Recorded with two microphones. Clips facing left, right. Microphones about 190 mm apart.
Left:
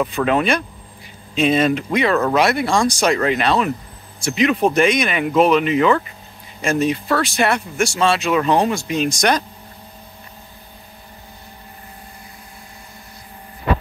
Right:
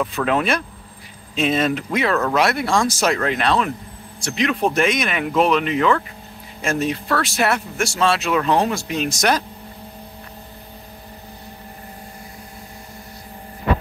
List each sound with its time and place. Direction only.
0.0 s speech: centre (ahead or behind)